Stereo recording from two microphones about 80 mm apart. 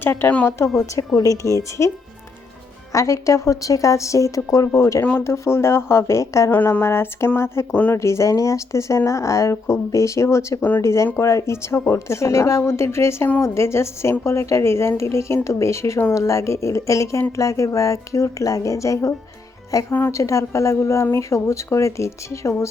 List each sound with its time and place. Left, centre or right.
0.0 s speech: left
0.9 s a woman's voice: left
2.9 s a woman's voice: left
7.7 s speech: centre
7.9 s a woman's voice: left